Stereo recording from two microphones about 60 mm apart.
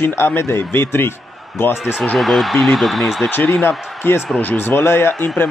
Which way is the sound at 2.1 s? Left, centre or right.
Centre.